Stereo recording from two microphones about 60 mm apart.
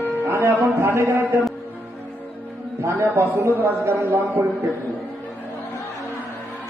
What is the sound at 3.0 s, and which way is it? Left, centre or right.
A man's voice, right.